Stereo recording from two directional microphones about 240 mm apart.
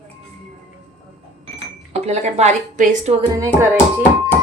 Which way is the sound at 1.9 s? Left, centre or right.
Right.